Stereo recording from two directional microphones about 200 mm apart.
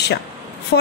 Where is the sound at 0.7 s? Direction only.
70° left (ahead or behind).